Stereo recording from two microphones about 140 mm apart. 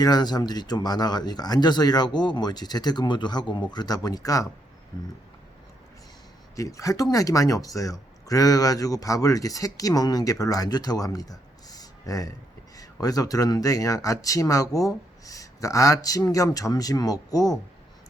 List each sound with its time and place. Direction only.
0.0 s speech: 30° left (ahead or behind)
6.6 s speech: 25° left (ahead or behind)